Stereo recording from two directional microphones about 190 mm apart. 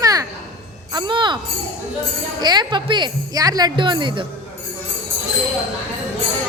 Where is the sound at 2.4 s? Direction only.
20° right (ahead or behind).